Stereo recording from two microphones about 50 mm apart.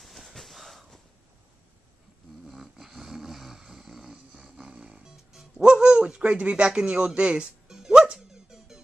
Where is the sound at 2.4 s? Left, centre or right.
Centre.